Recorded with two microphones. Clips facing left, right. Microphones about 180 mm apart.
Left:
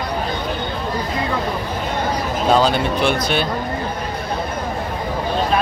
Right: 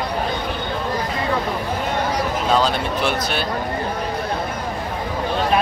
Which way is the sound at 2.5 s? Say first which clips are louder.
Left 3 dB; centre (ahead or behind).